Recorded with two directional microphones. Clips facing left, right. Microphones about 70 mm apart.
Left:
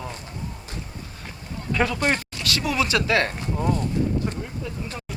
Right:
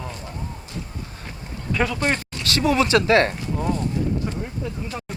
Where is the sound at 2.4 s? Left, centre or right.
Right.